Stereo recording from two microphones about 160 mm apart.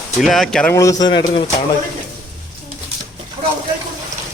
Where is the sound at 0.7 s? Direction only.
20° left (ahead or behind).